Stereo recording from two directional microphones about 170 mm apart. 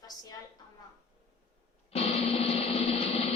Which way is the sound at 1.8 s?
35° left (ahead or behind).